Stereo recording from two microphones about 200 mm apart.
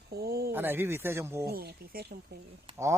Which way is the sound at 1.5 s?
50° right (ahead or behind).